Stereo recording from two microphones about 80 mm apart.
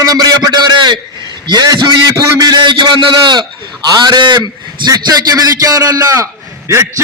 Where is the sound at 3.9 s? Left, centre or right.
Right.